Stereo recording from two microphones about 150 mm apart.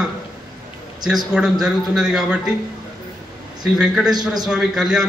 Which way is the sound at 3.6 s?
5° right (ahead or behind).